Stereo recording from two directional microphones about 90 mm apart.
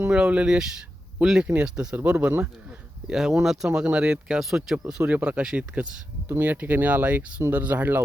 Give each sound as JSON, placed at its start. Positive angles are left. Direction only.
{"t": 0.1, "sound": "speech", "side_deg": -15}
{"t": 6.2, "sound": "speech", "side_deg": -25}